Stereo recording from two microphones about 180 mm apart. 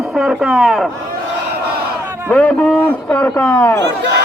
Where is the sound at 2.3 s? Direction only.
10° left (ahead or behind).